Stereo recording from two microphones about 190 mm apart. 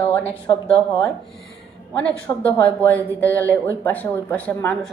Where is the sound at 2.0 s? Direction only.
10° left (ahead or behind).